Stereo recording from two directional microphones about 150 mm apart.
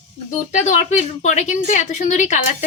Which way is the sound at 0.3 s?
55° left (ahead or behind).